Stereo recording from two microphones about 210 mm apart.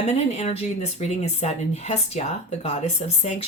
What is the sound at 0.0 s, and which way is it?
Speech, 30° left (ahead or behind).